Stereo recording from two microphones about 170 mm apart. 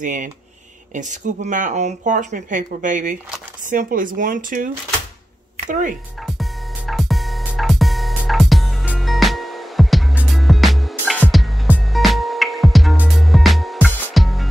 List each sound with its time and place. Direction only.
0.0 s speech: 50° right (ahead or behind)
5.7 s speech: 50° right (ahead or behind)
6.2 s music: centre (ahead or behind)